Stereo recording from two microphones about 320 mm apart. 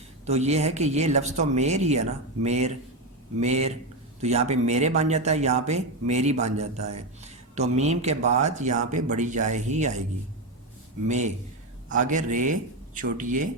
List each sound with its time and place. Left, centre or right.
0.3 s speech: centre
11.9 s speech: right